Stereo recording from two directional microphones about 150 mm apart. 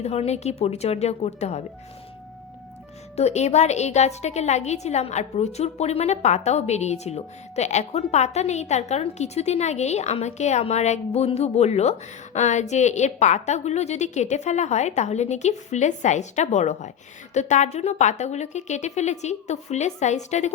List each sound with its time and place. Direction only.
0.0 s a woman's voice: 45° left (ahead or behind)
3.2 s a woman's voice: 45° left (ahead or behind)